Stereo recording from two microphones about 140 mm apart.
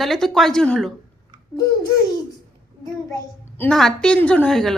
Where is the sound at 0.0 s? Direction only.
Centre (ahead or behind).